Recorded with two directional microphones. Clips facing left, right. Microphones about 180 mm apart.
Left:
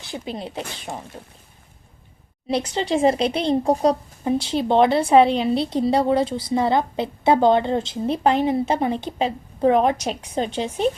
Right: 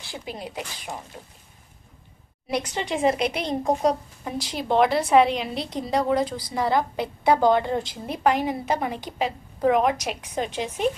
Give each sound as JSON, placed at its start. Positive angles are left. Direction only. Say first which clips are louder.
{"t": 0.0, "sound": "speech", "louder": "left 4 dB", "side_deg": 20}
{"t": 2.5, "sound": "speech", "louder": "left 5 dB", "side_deg": 30}